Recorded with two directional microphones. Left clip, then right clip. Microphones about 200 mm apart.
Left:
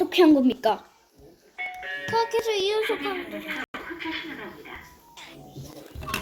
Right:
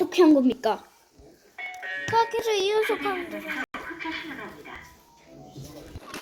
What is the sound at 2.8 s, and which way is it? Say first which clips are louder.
Speech: right 1 dB; 55° right (ahead or behind).